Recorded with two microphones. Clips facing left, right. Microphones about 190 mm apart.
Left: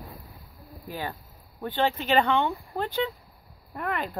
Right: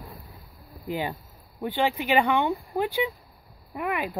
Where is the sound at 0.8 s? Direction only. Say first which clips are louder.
Right 5 dB; 15° right (ahead or behind).